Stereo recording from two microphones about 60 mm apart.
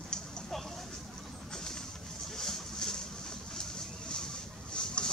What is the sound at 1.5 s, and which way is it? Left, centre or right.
Boat, centre.